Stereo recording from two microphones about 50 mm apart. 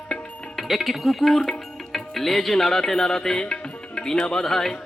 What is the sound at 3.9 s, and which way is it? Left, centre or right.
Speech, centre.